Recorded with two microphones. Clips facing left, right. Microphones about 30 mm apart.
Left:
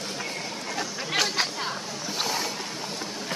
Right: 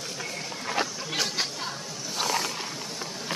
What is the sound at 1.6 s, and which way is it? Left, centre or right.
Chatter, left.